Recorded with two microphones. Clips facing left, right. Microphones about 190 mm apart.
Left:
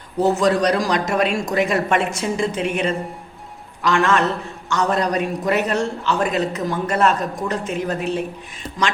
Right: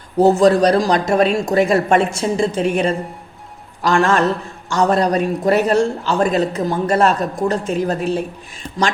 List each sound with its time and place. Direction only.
0.2 s a man's voice: 30° right (ahead or behind)